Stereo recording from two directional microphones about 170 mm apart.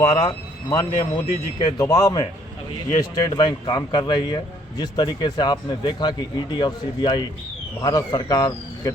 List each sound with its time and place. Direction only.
0.0 s speech: 20° left (ahead or behind)